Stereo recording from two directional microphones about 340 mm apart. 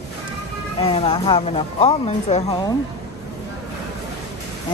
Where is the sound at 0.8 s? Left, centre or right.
Centre.